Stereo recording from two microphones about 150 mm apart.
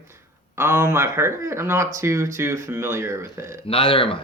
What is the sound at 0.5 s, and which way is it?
Speech, 15° right (ahead or behind).